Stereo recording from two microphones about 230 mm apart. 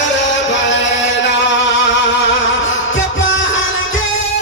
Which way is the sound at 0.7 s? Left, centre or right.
Left.